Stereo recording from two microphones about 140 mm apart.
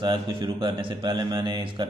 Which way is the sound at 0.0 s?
35° right (ahead or behind).